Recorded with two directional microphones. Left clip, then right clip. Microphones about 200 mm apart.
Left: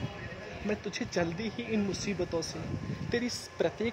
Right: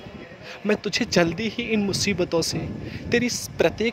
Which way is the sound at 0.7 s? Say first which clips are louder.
Right 12 dB; 35° right (ahead or behind).